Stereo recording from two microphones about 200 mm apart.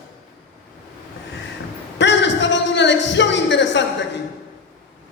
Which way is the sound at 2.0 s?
60° left (ahead or behind).